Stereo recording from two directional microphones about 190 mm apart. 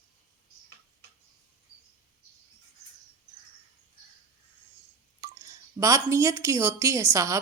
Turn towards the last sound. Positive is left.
turn(degrees=-15)  # may be behind; listen again after turning